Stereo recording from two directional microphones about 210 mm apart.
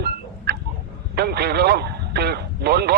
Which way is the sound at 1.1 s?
50° right (ahead or behind).